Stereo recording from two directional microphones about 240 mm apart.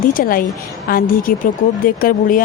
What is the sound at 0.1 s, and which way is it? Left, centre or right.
Speech, left.